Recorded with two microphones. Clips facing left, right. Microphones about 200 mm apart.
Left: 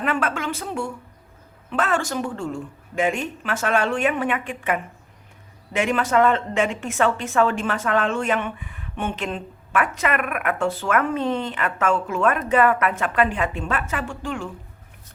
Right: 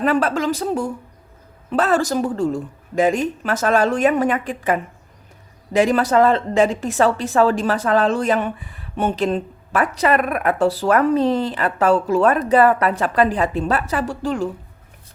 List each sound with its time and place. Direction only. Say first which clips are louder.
0.0 s speech: right 6 dB; 35° right (ahead or behind)